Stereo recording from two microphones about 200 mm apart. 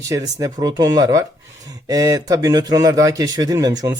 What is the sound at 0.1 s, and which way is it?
A man's voice, 15° right (ahead or behind).